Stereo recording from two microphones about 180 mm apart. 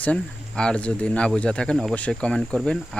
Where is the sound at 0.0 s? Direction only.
5° left (ahead or behind).